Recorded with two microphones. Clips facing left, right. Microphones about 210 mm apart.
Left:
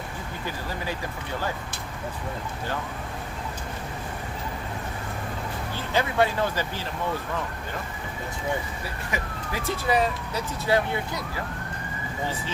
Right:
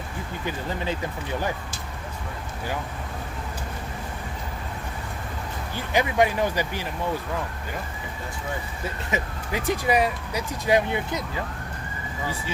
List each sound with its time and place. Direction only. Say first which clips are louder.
5.9 s speech: right 2 dB; 15° right (ahead or behind)
9.0 s speech: right 3 dB; 20° right (ahead or behind)